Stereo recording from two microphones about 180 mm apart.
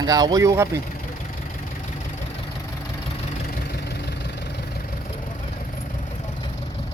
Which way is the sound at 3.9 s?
65° left (ahead or behind).